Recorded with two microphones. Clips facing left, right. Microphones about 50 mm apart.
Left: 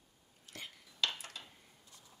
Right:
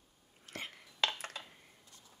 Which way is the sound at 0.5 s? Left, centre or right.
Right.